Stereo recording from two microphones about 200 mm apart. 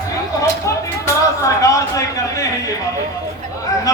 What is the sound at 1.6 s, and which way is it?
Speech, 15° left (ahead or behind).